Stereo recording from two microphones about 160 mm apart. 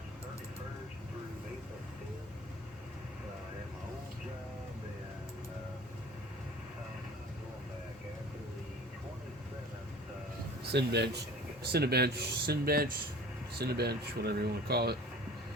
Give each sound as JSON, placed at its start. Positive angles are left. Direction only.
{"t": 10.7, "sound": "speech", "side_deg": -90}
{"t": 13.6, "sound": "speech", "side_deg": -90}